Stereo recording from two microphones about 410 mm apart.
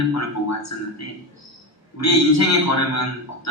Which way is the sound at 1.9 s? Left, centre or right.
Left.